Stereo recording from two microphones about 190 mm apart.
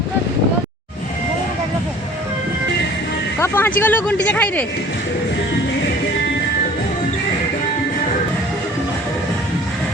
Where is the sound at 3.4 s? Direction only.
10° left (ahead or behind).